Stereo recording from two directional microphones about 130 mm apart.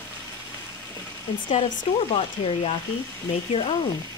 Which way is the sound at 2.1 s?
45° left (ahead or behind).